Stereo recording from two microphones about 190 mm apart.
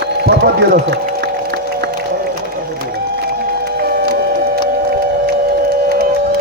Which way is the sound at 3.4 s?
55° right (ahead or behind).